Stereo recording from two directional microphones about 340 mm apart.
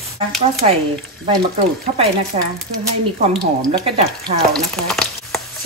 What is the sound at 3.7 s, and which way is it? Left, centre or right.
Speech, centre.